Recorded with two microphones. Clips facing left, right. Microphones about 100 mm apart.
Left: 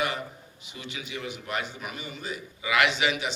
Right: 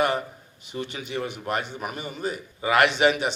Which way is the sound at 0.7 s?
45° right (ahead or behind).